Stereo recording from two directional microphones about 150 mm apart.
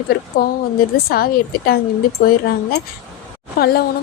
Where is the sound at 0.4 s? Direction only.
90° left.